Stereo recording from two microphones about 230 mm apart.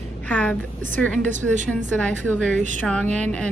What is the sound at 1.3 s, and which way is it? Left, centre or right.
Speech, right.